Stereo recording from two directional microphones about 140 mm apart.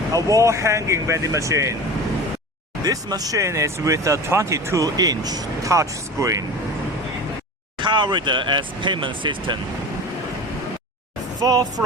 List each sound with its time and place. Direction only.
0.1 s speech: 20° right (ahead or behind)
2.8 s speech: 25° right (ahead or behind)
7.8 s speech: 35° right (ahead or behind)
11.3 s speech: 30° right (ahead or behind)